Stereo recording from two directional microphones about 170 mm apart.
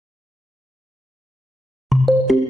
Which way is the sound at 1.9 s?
Centre (ahead or behind).